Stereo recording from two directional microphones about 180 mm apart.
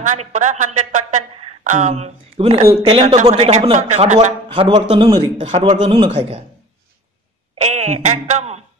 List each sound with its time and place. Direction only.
0.0 s a woman's voice: 40° right (ahead or behind)
2.6 s speech: 15° right (ahead or behind)
3.0 s a man's voice: 35° right (ahead or behind)
7.6 s speech: 40° right (ahead or behind)